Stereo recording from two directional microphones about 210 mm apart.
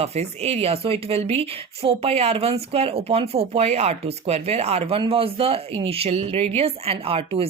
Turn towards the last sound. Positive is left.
turn(degrees=-25)  # may be behind; listen again after turning